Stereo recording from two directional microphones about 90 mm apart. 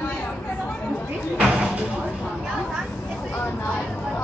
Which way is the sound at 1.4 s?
10° right (ahead or behind).